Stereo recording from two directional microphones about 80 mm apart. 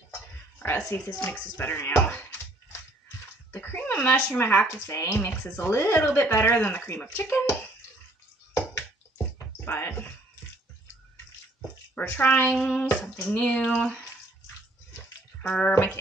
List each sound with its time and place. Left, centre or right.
0.6 s a woman's voice: left
3.5 s speech: left
9.7 s a sound: left
11.9 s speech: left
15.4 s water: centre